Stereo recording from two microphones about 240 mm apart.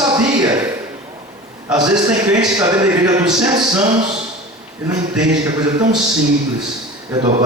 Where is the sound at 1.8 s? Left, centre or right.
Centre.